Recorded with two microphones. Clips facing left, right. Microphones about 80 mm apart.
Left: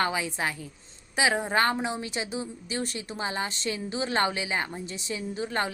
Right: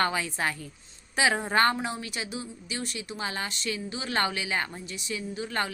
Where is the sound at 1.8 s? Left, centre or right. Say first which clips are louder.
Left 2 dB; centre.